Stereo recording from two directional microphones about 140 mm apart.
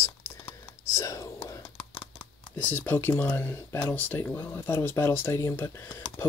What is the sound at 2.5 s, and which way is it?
Speech, 10° left (ahead or behind).